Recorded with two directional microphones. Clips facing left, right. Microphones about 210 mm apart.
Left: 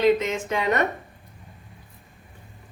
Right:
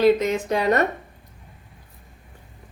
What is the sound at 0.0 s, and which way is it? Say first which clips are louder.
Speech: right 3 dB; 40° right (ahead or behind).